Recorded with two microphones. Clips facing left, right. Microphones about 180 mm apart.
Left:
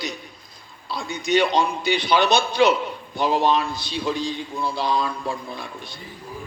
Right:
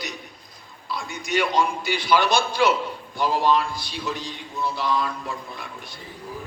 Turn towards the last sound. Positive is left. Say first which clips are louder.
# left 3 dB
turn(degrees=30)  # may be behind; listen again after turning